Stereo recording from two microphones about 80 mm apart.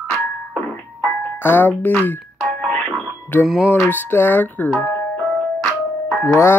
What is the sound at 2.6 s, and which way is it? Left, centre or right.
Music, centre.